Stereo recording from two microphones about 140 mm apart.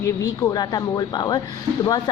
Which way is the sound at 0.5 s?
30° left (ahead or behind).